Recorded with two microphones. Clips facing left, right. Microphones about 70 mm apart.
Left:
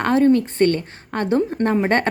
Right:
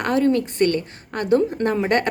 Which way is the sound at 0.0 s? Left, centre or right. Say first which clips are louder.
Left 3 dB; left.